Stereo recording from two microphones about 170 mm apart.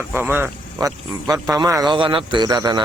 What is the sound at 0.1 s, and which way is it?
Speech, 10° right (ahead or behind).